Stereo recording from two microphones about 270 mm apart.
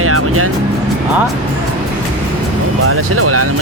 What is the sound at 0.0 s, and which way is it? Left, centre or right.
Music, right.